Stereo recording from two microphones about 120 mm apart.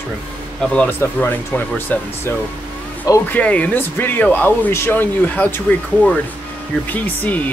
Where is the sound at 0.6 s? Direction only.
10° left (ahead or behind).